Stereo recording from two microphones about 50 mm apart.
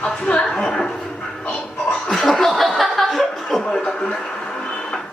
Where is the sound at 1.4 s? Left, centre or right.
Centre.